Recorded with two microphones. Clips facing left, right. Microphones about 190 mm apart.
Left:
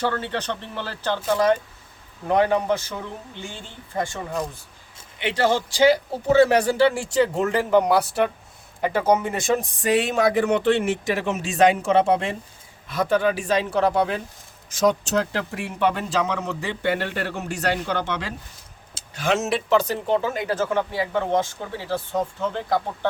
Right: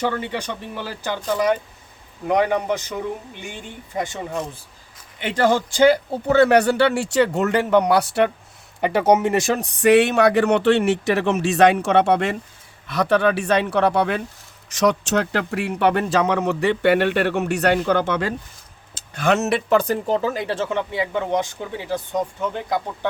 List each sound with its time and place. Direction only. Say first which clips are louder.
0.0 s speech: right 1 dB; 15° right (ahead or behind)
2.2 s speech: even; 15° right (ahead or behind)
5.2 s speech: right 2 dB; 50° right (ahead or behind); by 22.8 s 15° right (ahead or behind)